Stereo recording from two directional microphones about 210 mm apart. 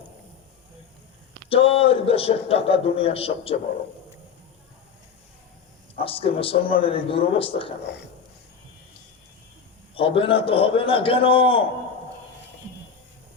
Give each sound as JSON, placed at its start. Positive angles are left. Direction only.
{"t": 1.5, "sound": "a man's voice", "side_deg": 25}
{"t": 6.0, "sound": "a man's voice", "side_deg": 25}
{"t": 9.9, "sound": "a man's voice", "side_deg": 25}